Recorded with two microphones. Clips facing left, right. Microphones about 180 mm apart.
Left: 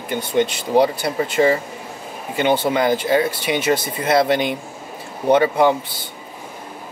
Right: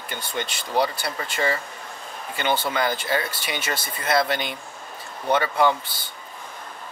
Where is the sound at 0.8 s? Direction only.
10° left (ahead or behind).